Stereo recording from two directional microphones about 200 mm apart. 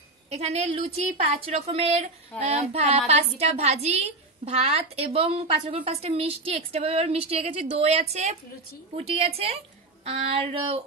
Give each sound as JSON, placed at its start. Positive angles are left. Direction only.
{"t": 0.3, "sound": "a woman's voice", "side_deg": -30}
{"t": 8.9, "sound": "child singing", "side_deg": -30}